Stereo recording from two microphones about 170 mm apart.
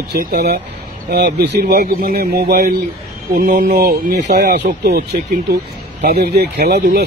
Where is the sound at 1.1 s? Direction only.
75° right (ahead or behind).